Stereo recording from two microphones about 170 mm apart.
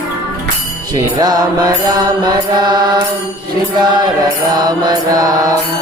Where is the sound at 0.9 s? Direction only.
20° right (ahead or behind).